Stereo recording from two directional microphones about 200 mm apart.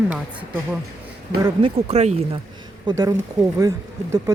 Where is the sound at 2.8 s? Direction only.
20° right (ahead or behind).